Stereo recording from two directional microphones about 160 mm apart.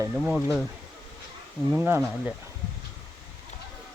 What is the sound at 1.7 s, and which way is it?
Speech, 10° right (ahead or behind).